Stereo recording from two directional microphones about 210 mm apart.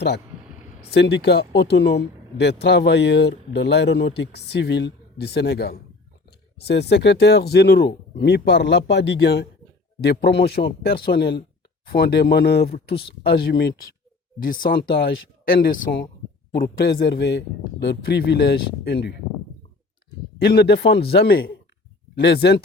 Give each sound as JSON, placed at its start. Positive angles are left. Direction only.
{"t": 0.9, "sound": "speech", "side_deg": 55}
{"t": 20.4, "sound": "speech", "side_deg": 50}